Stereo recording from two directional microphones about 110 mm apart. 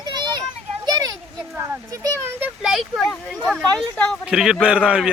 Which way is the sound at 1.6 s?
25° right (ahead or behind).